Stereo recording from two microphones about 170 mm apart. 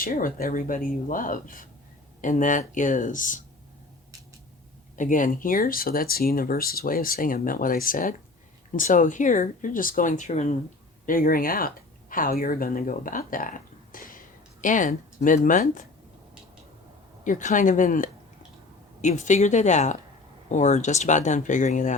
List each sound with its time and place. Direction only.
0.0 s speech: 55° left (ahead or behind)
4.9 s speech: 50° left (ahead or behind)
11.0 s speech: 55° left (ahead or behind)
17.2 s speech: 50° left (ahead or behind)